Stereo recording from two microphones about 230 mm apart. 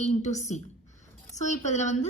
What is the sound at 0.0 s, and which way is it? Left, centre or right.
A woman's voice, left.